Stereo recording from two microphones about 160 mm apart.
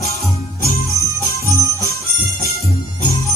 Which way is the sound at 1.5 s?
20° left (ahead or behind).